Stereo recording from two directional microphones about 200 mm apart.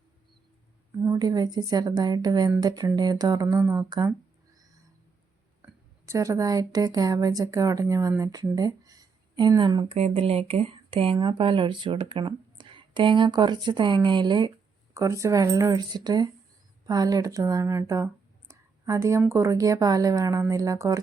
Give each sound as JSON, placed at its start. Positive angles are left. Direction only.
{"t": 0.9, "sound": "speech", "side_deg": -15}
{"t": 4.5, "sound": "a sound", "side_deg": -20}
{"t": 5.6, "sound": "speech", "side_deg": -15}